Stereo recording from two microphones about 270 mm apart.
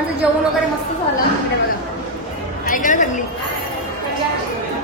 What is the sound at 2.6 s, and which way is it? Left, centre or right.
Speech, left.